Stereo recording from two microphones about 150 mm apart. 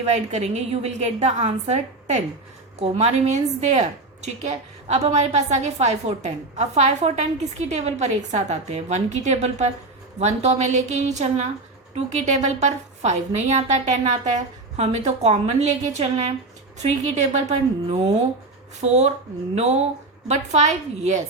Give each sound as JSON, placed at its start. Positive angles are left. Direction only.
{"t": 0.0, "sound": "a woman's voice", "side_deg": -50}